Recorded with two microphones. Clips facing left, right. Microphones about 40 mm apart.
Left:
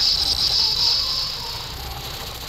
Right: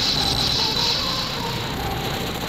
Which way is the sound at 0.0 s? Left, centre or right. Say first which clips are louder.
Right 1 dB; right.